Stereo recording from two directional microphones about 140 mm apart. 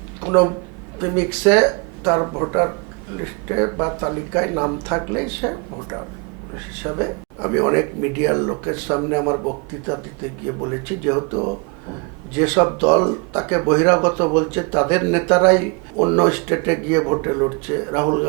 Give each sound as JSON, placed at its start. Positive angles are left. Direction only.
{"t": 0.3, "sound": "speech", "side_deg": -20}
{"t": 11.1, "sound": "speech", "side_deg": -20}